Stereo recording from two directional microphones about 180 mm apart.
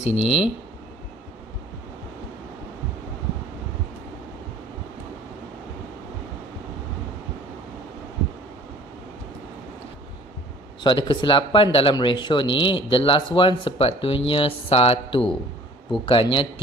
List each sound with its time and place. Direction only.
0.0 s speech: 35° left (ahead or behind)
10.8 s speech: 25° left (ahead or behind)